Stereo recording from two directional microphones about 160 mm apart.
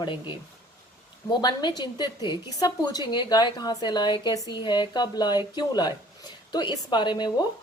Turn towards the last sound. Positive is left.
turn(degrees=30)  # may be behind; listen again after turning